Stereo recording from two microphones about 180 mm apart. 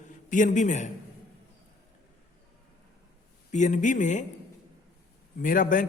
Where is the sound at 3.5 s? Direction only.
40° left (ahead or behind).